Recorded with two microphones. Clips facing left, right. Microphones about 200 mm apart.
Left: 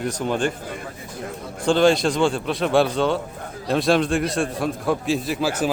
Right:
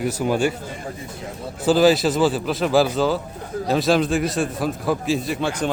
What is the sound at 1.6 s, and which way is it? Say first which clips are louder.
A man's voice: right 1 dB; 5° right (ahead or behind).